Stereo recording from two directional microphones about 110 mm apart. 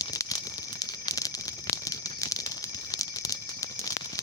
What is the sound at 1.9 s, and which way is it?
Rattle, 30° left (ahead or behind).